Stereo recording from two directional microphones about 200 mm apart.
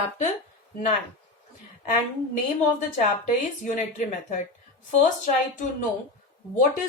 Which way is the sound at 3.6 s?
35° left (ahead or behind).